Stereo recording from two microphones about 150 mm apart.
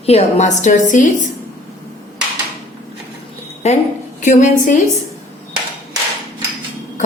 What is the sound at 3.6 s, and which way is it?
Speech, 45° left (ahead or behind).